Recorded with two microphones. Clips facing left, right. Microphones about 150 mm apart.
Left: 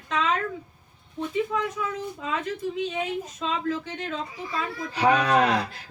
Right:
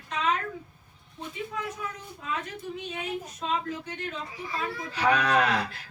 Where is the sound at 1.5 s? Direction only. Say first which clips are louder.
Left 8 dB; 90° left.